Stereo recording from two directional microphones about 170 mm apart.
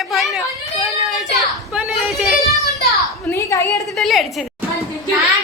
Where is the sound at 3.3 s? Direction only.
20° left (ahead or behind).